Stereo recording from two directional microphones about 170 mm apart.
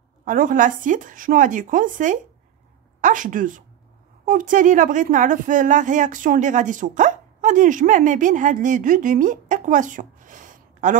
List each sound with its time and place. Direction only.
0.2 s a woman's voice: 55° right (ahead or behind)